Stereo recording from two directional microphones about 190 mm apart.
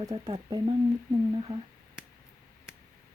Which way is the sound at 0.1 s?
30° right (ahead or behind).